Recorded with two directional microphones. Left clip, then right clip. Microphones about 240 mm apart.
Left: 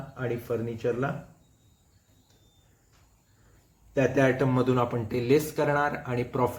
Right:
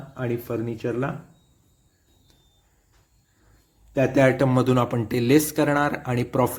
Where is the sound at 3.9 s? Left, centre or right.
Right.